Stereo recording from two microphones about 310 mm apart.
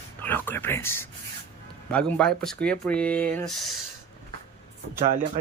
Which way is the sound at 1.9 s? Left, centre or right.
Centre.